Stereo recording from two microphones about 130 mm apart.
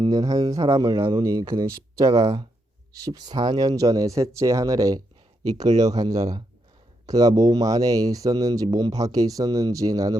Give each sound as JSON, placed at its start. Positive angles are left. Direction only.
{"t": 0.0, "sound": "speech", "side_deg": -30}